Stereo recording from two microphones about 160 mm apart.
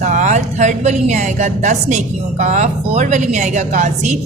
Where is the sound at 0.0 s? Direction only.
50° right (ahead or behind).